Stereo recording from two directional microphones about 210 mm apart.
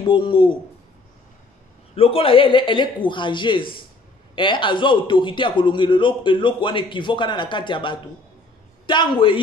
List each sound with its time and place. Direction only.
0.1 s a man's voice: 25° left (ahead or behind)
2.0 s a man's voice: 25° left (ahead or behind)